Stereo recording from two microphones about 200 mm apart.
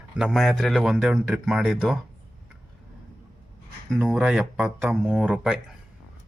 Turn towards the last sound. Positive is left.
turn(degrees=-5)  # may be behind; listen again after turning